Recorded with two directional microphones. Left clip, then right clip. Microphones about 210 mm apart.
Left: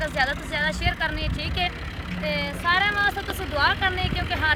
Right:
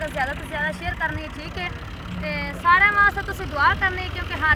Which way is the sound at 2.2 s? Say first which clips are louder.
Right 5 dB; 60° left (ahead or behind).